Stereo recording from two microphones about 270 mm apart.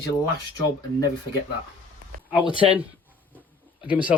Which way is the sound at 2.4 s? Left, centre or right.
Centre.